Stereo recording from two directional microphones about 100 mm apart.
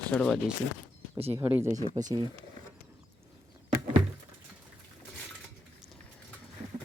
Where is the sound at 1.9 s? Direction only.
40° right (ahead or behind).